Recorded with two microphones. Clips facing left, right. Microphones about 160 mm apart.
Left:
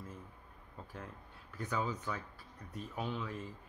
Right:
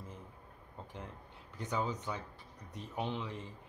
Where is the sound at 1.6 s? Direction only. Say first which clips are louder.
Right 1 dB; 20° right (ahead or behind).